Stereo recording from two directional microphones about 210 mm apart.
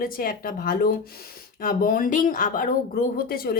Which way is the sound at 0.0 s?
45° left (ahead or behind).